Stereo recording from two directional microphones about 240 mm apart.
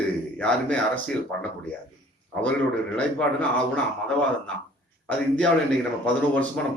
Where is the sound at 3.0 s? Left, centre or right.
Centre.